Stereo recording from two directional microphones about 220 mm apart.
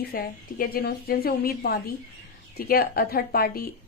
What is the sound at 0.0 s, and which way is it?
A woman's voice, 40° left (ahead or behind).